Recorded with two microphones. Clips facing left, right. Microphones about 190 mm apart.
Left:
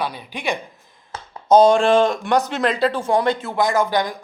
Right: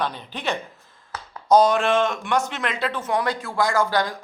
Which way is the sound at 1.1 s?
25° left (ahead or behind).